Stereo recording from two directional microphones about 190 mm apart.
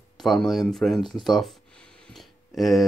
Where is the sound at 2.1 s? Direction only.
Centre (ahead or behind).